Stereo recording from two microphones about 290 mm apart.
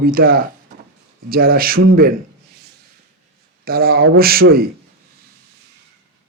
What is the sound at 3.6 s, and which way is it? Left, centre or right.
Speech, right.